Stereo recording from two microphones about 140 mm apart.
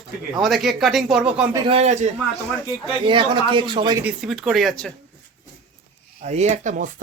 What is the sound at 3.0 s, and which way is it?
Speech, 35° right (ahead or behind).